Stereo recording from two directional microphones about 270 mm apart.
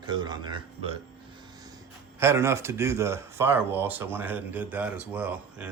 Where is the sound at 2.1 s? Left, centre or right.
Centre.